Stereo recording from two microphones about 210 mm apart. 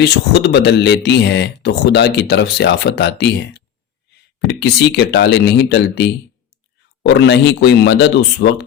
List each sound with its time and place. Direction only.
0.0 s speech: 50° left (ahead or behind)